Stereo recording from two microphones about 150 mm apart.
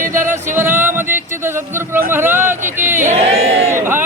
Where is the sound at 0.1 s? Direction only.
15° right (ahead or behind).